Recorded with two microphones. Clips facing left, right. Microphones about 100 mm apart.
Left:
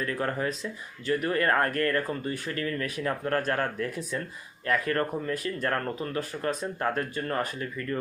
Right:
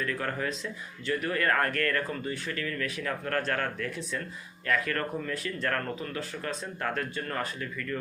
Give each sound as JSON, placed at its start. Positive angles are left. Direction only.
{"t": 0.0, "sound": "speech", "side_deg": 30}
{"t": 2.0, "sound": "speech", "side_deg": 40}